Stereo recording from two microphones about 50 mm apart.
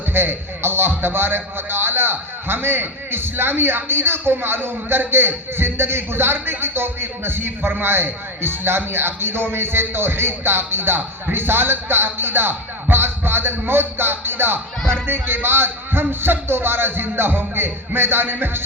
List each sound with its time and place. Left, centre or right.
0.1 s a man's voice: right